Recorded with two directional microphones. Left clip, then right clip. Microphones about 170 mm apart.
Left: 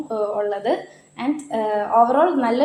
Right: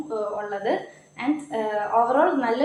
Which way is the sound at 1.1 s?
40° left (ahead or behind).